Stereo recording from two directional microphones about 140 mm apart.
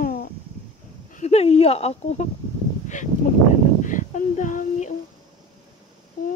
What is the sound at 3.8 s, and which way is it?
Female singing, 65° left (ahead or behind).